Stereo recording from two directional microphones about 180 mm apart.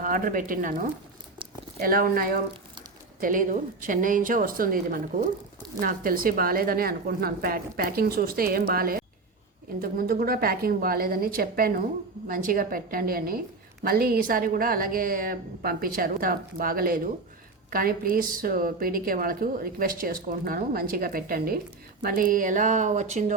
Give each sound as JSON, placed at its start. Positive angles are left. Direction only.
{"t": 0.0, "sound": "a woman's voice", "side_deg": -50}